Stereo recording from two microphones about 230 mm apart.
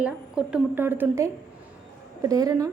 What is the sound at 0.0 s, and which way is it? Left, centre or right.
A woman's voice, centre.